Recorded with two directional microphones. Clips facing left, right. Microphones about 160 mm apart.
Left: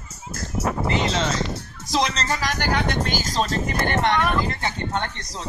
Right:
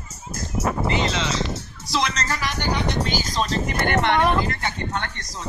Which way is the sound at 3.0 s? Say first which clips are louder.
Even; 50° left (ahead or behind).